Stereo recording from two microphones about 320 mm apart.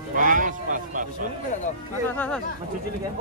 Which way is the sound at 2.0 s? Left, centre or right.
Centre.